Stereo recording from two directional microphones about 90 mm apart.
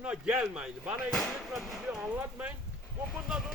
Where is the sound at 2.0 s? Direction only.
20° right (ahead or behind).